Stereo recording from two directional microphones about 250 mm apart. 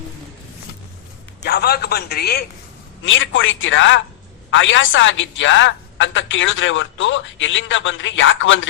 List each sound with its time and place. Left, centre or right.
1.5 s a woman's voice: left